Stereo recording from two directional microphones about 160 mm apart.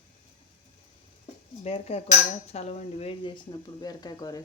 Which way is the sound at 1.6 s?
40° left (ahead or behind).